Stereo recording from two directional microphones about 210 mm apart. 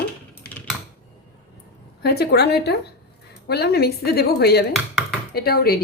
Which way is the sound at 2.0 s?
50° left (ahead or behind).